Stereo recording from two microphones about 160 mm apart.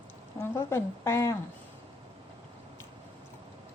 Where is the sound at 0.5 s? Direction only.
15° left (ahead or behind).